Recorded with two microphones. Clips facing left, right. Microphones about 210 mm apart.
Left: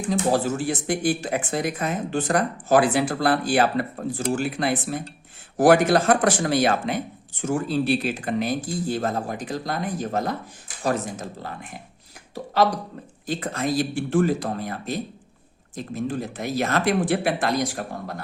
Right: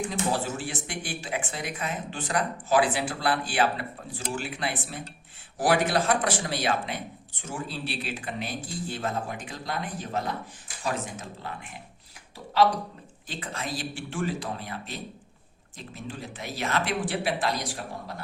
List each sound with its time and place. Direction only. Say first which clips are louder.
0.1 s speech: left 7 dB; 40° left (ahead or behind)
13.2 s speech: left 10 dB; 40° left (ahead or behind)